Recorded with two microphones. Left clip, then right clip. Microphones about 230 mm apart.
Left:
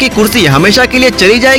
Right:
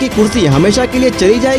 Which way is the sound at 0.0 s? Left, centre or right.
Centre.